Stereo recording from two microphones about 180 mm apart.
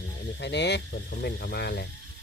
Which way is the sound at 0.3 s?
75° left (ahead or behind).